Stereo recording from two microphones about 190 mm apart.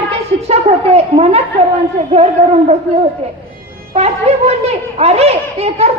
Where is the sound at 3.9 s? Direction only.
35° right (ahead or behind).